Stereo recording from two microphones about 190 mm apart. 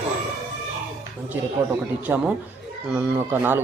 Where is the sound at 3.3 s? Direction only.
10° right (ahead or behind).